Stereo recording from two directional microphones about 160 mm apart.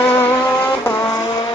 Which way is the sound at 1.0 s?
25° left (ahead or behind).